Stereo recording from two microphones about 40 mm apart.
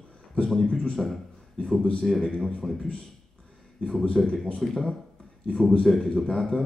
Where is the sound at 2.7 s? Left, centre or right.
Left.